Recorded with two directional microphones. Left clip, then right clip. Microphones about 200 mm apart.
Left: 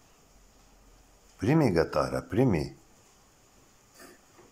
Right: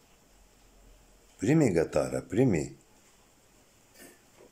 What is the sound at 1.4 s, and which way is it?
Speech, 20° right (ahead or behind).